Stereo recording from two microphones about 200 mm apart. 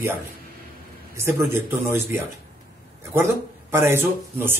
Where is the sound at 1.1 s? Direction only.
15° right (ahead or behind).